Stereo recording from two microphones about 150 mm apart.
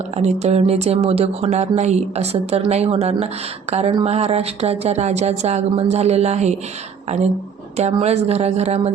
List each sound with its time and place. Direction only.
0.2 s speech: 50° right (ahead or behind)